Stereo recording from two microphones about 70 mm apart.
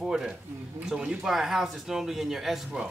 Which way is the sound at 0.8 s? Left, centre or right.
Centre.